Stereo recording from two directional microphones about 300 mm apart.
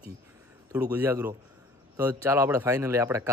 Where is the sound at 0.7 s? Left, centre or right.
Centre.